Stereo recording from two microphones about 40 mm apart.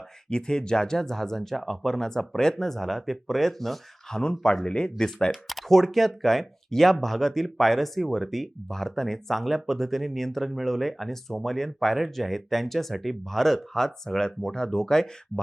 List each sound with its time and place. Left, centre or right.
0.3 s speech: left
4.2 s speech: centre
5.5 s speech: centre